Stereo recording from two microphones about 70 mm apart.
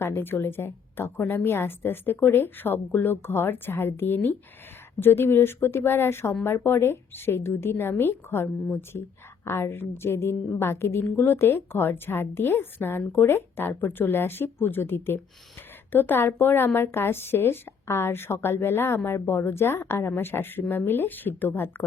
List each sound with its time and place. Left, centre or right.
0.0 s a woman's voice: left